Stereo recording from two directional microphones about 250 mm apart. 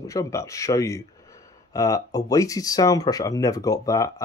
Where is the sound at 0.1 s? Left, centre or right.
Centre.